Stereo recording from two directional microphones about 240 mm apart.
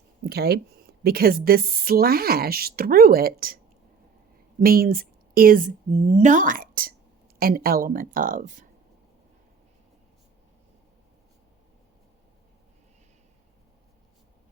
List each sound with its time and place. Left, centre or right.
0.3 s speech: right
4.6 s a woman's voice: right